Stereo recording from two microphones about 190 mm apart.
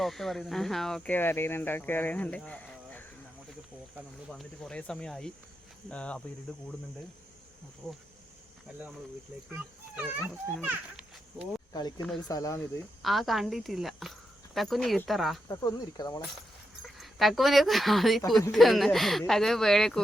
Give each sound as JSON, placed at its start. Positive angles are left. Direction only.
{"t": 0.0, "sound": "speech", "side_deg": 0}
{"t": 4.3, "sound": "speech", "side_deg": 5}
{"t": 9.9, "sound": "a child's voice", "side_deg": -10}
{"t": 11.7, "sound": "speech", "side_deg": 20}
{"t": 13.0, "sound": "speech", "side_deg": 0}
{"t": 15.4, "sound": "speech", "side_deg": 20}
{"t": 16.8, "sound": "speech", "side_deg": 0}